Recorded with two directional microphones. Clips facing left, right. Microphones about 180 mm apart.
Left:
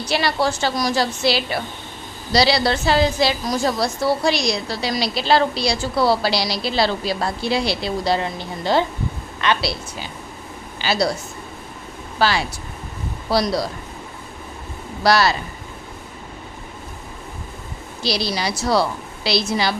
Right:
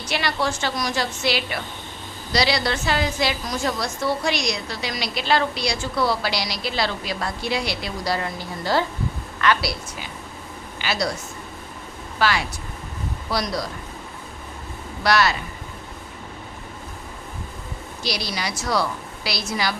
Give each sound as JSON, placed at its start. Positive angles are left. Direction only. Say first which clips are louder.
{"t": 0.1, "sound": "a woman's voice", "louder": "left 4 dB", "side_deg": 35}
{"t": 12.2, "sound": "a woman's voice", "louder": "left 3 dB", "side_deg": 30}
{"t": 15.0, "sound": "a woman's voice", "louder": "left 3 dB", "side_deg": 35}
{"t": 18.0, "sound": "a woman's voice", "louder": "left 5 dB", "side_deg": 30}